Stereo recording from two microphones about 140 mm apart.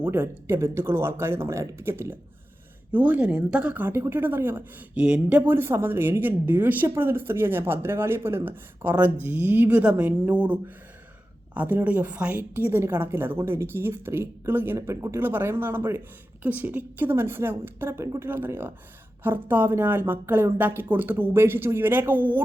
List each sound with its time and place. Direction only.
0.0 s a woman's voice: 15° right (ahead or behind)